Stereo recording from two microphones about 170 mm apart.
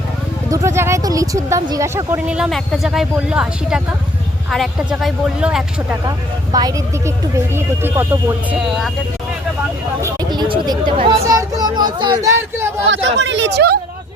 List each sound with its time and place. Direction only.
0.5 s speech: 15° right (ahead or behind)
2.2 s speech: 5° right (ahead or behind)
6.1 s speech: 20° right (ahead or behind)
8.5 s speech: centre (ahead or behind)
10.0 s speech: 25° right (ahead or behind)
11.2 s a sound: 20° right (ahead or behind)
12.9 s speech: 90° right